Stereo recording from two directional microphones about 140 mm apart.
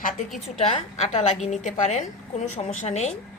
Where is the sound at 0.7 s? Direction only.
55° left (ahead or behind).